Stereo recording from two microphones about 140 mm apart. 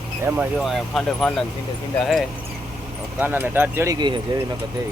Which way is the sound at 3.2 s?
15° right (ahead or behind).